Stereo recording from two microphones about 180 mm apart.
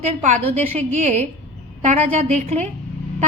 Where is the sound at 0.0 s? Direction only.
40° right (ahead or behind).